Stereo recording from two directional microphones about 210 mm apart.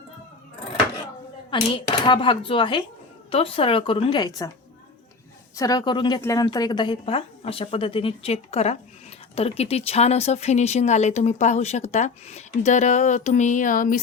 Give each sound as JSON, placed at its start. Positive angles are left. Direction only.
{"t": 1.5, "sound": "speech", "side_deg": 25}
{"t": 5.5, "sound": "speech", "side_deg": 15}